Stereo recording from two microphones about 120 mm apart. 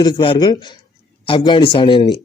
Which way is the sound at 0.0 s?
40° left (ahead or behind).